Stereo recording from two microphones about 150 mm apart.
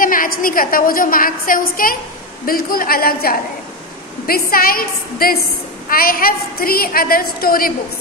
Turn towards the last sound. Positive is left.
turn(degrees=75)  # may be behind; listen again after turning